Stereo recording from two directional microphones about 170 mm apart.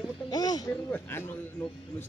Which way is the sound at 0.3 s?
25° left (ahead or behind).